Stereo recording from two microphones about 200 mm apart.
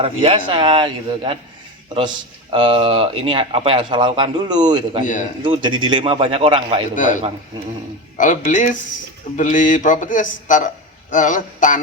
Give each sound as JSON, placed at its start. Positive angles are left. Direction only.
{"t": 0.0, "sound": "speech", "side_deg": -25}
{"t": 6.9, "sound": "a man's voice", "side_deg": 40}
{"t": 8.2, "sound": "a man's voice", "side_deg": 40}